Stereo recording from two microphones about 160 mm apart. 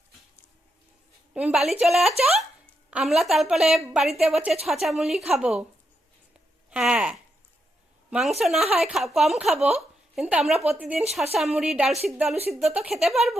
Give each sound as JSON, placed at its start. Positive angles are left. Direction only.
{"t": 1.3, "sound": "a woman's voice", "side_deg": -5}
{"t": 6.7, "sound": "a woman's voice", "side_deg": -5}
{"t": 9.6, "sound": "speech", "side_deg": -40}
{"t": 10.2, "sound": "a woman's voice", "side_deg": -5}